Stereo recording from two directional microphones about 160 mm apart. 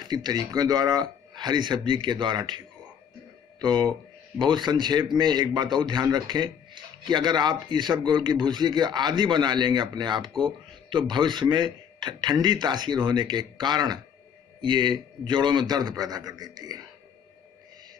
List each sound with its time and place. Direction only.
0.0 s a man's voice: 25° right (ahead or behind)
3.6 s a man's voice: 25° right (ahead or behind)